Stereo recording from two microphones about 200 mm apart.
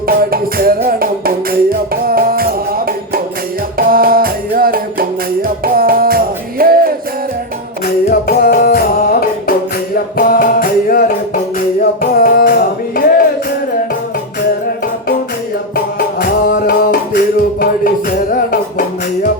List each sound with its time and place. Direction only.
0.1 s music: 45° right (ahead or behind)
8.1 s music: 45° left (ahead or behind)
10.2 s music: 45° left (ahead or behind)
12.2 s music: 45° left (ahead or behind)
16.6 s music: 45° left (ahead or behind)